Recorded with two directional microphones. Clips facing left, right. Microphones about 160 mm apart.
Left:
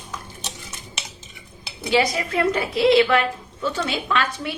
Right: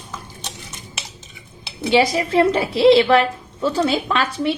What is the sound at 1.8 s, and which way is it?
A woman's voice, 30° right (ahead or behind).